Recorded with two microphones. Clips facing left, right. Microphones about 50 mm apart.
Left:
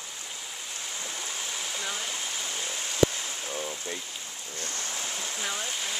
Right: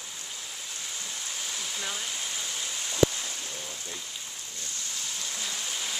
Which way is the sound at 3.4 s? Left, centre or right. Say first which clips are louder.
Left 5 dB; left.